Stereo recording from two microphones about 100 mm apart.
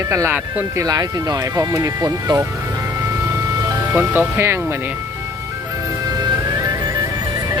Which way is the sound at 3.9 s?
20° right (ahead or behind).